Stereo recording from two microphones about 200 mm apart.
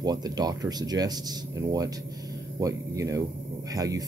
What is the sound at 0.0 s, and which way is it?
Speech, 20° right (ahead or behind).